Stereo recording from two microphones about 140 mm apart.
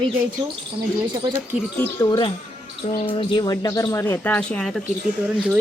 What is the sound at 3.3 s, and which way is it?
Speech, 30° left (ahead or behind).